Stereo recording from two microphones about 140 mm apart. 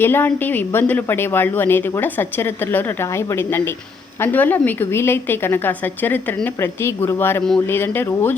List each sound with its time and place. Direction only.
0.0 s a woman's voice: 15° left (ahead or behind)